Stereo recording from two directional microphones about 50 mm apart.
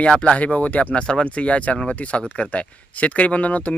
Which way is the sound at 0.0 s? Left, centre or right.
Left.